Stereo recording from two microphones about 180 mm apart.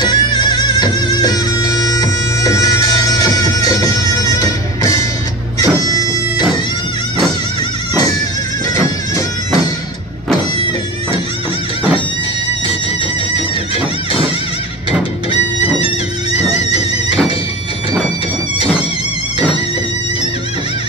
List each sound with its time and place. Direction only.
0.0 s music: 25° left (ahead or behind)